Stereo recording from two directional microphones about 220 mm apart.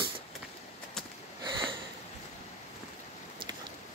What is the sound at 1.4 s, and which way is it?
Sniff, 25° right (ahead or behind).